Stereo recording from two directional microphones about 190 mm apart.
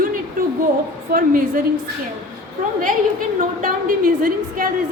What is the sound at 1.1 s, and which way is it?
Speech, 45° right (ahead or behind).